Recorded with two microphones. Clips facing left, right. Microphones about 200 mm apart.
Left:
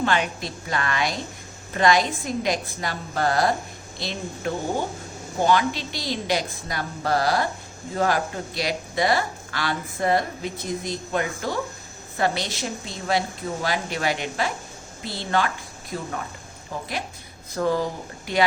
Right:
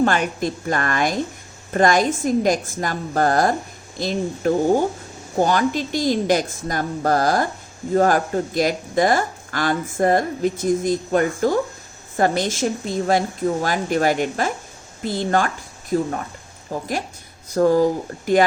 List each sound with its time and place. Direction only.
0.0 s a woman's voice: 50° right (ahead or behind)